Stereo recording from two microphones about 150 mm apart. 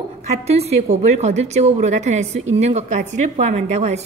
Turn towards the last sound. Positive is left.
turn(degrees=-45)  # may be behind; listen again after turning